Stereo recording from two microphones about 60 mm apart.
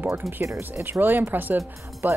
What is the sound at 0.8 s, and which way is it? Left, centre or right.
Speech, right.